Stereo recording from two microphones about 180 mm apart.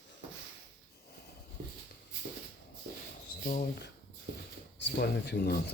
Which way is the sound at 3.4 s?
40° left (ahead or behind).